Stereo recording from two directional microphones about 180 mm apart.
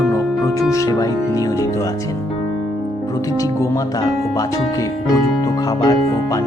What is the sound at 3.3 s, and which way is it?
Speech, 20° left (ahead or behind).